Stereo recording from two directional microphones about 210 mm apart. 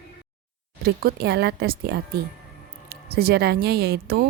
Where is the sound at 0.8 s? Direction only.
50° right (ahead or behind).